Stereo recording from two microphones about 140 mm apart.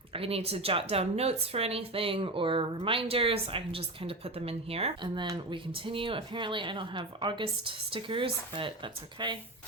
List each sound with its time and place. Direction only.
0.1 s speech: 45° right (ahead or behind)